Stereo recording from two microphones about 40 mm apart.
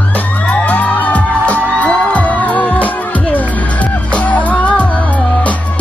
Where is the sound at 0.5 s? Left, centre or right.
Left.